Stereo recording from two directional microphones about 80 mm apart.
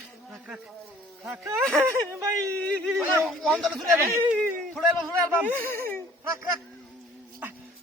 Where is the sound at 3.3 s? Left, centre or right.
Centre.